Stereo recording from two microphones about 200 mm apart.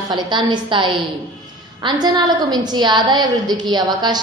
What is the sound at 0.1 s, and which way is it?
A woman's voice, 20° right (ahead or behind).